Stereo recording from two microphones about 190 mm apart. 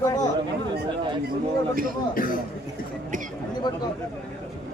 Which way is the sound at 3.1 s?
45° right (ahead or behind).